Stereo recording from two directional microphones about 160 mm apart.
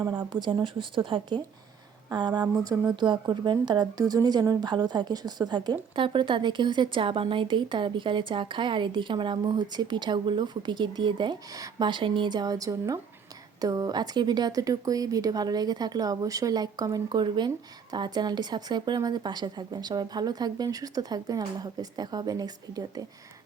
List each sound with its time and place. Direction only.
0.3 s a woman's voice: 30° right (ahead or behind)